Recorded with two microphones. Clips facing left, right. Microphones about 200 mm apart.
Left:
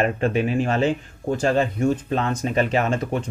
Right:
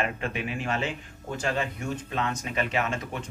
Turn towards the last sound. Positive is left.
turn(degrees=40)  # may be behind; listen again after turning